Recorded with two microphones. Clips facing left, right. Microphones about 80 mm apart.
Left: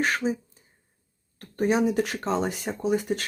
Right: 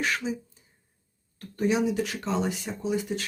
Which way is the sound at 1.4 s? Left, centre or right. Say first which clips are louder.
Left 2 dB; left.